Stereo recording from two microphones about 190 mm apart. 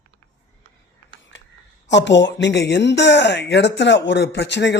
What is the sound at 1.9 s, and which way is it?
Speech, 70° left (ahead or behind).